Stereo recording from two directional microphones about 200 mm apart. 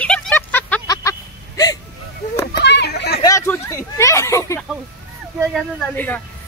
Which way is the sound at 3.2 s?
15° left (ahead or behind).